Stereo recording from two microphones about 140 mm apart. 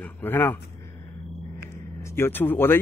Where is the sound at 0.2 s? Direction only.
15° left (ahead or behind).